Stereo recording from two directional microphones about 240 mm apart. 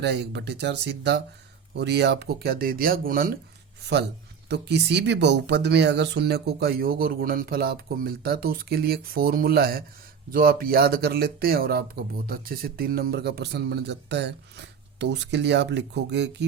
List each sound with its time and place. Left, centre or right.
0.0 s speech: right
4.4 s speech: right